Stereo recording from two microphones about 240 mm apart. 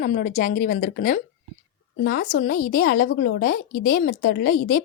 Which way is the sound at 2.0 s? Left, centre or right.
Left.